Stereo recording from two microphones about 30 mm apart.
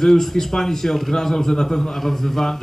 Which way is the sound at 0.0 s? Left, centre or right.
Centre.